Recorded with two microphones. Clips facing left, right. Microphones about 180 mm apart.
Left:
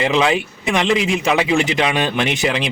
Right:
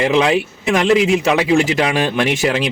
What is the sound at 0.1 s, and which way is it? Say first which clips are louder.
Speech: right 2 dB; centre (ahead or behind).